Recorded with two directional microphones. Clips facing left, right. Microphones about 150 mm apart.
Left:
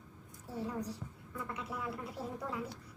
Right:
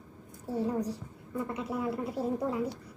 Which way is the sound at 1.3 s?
30° right (ahead or behind).